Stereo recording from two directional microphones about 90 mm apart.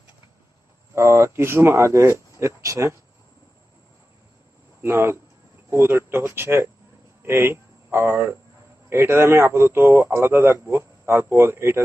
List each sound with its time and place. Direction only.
0.9 s speech: 30° right (ahead or behind)
4.8 s speech: 25° right (ahead or behind)